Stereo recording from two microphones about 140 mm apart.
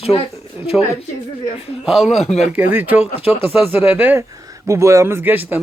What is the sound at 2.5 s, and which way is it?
A man's voice, 15° right (ahead or behind).